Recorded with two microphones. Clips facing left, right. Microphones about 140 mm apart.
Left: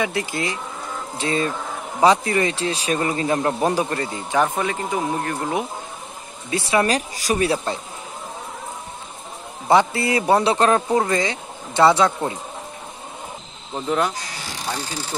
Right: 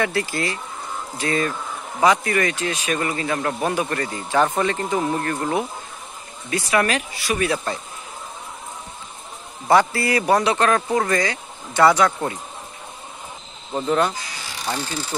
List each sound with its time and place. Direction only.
0.0 s speech: 15° left (ahead or behind)
6.5 s speech: 25° left (ahead or behind)
6.9 s speech: 40° left (ahead or behind)
9.7 s speech: 20° left (ahead or behind)
13.7 s speech: 5° left (ahead or behind)